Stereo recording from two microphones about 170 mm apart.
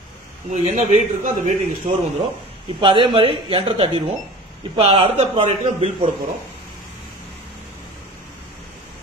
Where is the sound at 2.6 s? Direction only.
30° right (ahead or behind).